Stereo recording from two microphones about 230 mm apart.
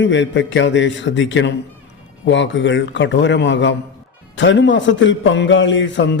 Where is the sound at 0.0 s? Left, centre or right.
Left.